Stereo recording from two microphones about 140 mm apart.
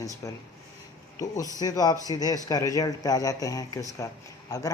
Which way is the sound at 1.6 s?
30° left (ahead or behind).